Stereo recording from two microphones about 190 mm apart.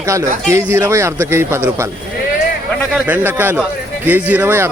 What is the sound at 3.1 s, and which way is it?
Speech, 10° right (ahead or behind).